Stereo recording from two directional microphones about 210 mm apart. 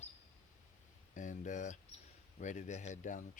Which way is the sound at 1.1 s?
35° left (ahead or behind).